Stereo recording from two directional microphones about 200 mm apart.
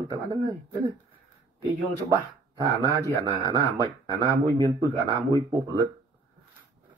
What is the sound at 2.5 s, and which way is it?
Speech, 20° right (ahead or behind).